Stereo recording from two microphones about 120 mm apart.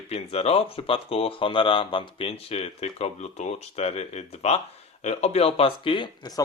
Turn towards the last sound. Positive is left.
turn(degrees=40)  # may be behind; listen again after turning